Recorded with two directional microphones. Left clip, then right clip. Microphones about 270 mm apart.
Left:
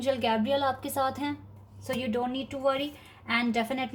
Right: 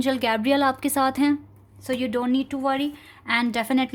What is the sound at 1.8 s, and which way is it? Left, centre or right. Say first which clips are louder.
A woman's voice: right 5 dB; right.